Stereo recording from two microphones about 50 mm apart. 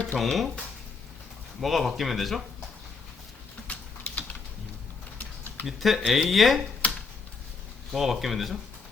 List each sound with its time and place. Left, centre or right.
0.2 s speech: centre
1.6 s speech: centre
3.7 s typing: left
5.6 s speech: centre
6.8 s a sound: left
7.9 s speech: centre